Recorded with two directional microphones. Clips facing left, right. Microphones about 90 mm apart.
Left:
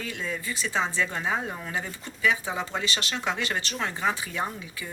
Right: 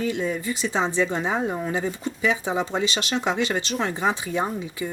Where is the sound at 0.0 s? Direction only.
20° right (ahead or behind).